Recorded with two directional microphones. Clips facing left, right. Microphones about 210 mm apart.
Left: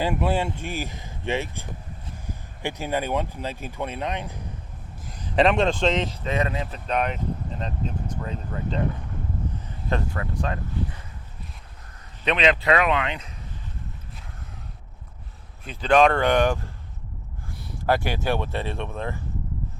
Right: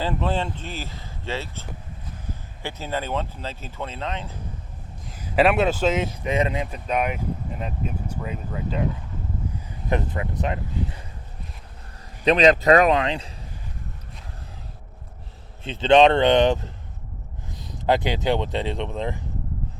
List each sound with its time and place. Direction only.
0.0 s speech: 10° left (ahead or behind)
5.0 s speech: 5° right (ahead or behind)
9.9 s speech: 20° right (ahead or behind)
12.2 s speech: 35° right (ahead or behind)
15.6 s speech: 25° right (ahead or behind)